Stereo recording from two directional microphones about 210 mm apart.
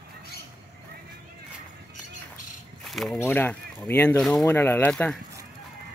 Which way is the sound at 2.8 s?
Centre (ahead or behind).